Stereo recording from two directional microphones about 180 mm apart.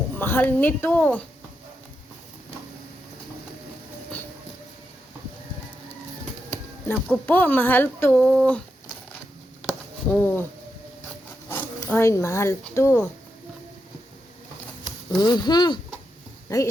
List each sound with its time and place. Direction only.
0.2 s speech: 10° left (ahead or behind)
7.1 s speech: 10° left (ahead or behind)
9.6 s a sound: 10° left (ahead or behind)
11.4 s speech: 10° left (ahead or behind)
15.1 s speech: 25° left (ahead or behind)